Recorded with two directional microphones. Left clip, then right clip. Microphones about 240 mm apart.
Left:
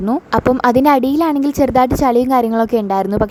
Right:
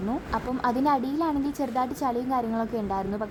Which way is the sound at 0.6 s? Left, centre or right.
Left.